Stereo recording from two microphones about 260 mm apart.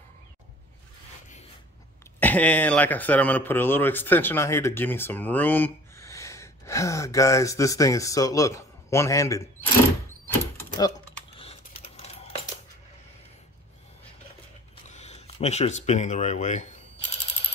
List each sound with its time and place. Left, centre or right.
2.1 s speech: centre
11.3 s coin: left
14.9 s speech: left